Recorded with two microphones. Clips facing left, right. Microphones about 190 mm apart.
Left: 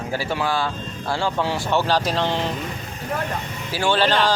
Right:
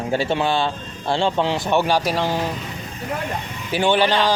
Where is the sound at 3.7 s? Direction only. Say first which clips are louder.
Right 2 dB; 20° right (ahead or behind).